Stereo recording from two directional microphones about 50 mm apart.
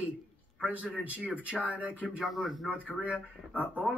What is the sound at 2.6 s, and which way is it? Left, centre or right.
Speech, right.